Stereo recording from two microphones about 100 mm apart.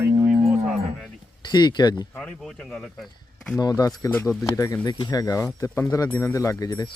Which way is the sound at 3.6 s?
40° left (ahead or behind).